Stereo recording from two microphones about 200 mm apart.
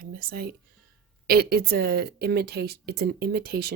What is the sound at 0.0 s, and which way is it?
Speech, 45° right (ahead or behind).